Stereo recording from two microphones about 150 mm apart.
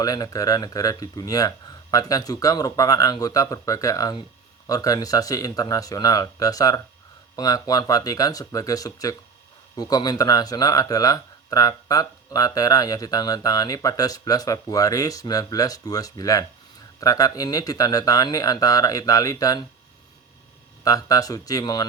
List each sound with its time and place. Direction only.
0.0 s speech: 25° left (ahead or behind)
20.8 s speech: 25° left (ahead or behind)